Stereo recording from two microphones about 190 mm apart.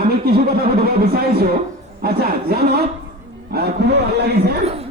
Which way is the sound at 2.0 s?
55° right (ahead or behind).